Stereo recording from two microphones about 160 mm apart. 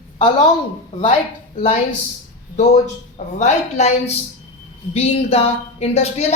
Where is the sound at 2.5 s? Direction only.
45° left (ahead or behind).